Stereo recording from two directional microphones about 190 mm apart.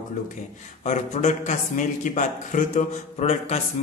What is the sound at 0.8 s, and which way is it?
Speech, 40° left (ahead or behind).